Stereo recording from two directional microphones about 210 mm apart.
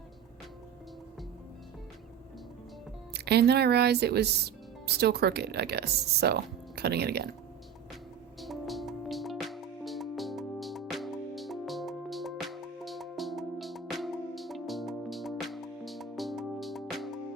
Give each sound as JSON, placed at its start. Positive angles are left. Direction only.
{"t": 3.1, "sound": "speech", "side_deg": -50}
{"t": 8.4, "sound": "music", "side_deg": 0}